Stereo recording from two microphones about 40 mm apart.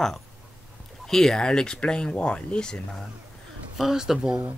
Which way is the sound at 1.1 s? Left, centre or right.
Centre.